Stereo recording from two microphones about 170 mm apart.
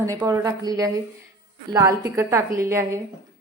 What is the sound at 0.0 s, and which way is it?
A woman's voice, 20° right (ahead or behind).